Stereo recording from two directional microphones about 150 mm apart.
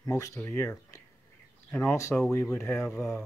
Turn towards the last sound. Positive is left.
turn(degrees=20)  # may be behind; listen again after turning